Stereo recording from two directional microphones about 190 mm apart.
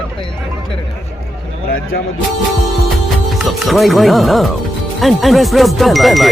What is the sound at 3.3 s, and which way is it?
Speech, centre (ahead or behind).